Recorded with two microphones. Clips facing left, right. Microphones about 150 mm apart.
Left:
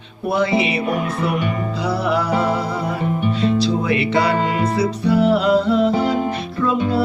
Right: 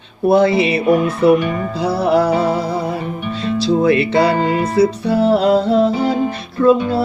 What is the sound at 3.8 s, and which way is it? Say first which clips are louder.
Music: right 5 dB; 40° right (ahead or behind).